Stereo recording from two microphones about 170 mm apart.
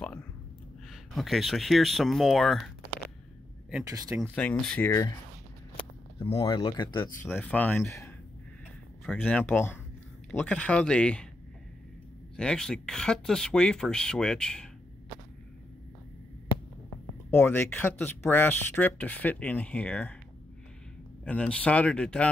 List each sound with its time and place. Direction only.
1.1 s speech: centre (ahead or behind)
3.8 s speech: 20° right (ahead or behind)
4.4 s speech: 10° left (ahead or behind)
6.1 s speech: 35° left (ahead or behind)
7.2 s speech: 10° left (ahead or behind)
12.4 s speech: 5° left (ahead or behind)
17.3 s speech: 10° left (ahead or behind)
21.2 s speech: 5° left (ahead or behind)